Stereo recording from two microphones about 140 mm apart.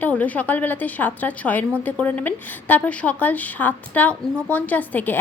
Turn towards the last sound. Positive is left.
turn(degrees=15)  # may be behind; listen again after turning